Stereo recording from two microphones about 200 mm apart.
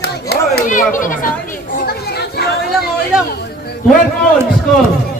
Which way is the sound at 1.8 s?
55° left (ahead or behind).